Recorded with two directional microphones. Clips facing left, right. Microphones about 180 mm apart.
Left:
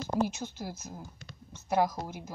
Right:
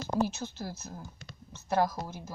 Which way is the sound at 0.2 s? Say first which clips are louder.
Right 1 dB; 15° left (ahead or behind).